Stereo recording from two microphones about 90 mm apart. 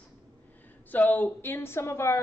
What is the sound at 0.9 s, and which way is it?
A woman's voice, 20° left (ahead or behind).